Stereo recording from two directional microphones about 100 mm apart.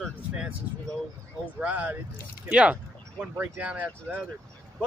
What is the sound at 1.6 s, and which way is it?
Speech, 15° right (ahead or behind).